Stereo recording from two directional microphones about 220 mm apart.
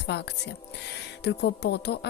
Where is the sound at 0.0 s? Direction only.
50° left (ahead or behind).